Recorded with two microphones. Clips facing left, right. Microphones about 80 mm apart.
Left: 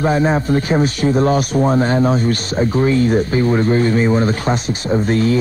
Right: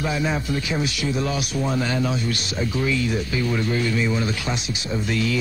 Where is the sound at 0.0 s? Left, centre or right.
Left.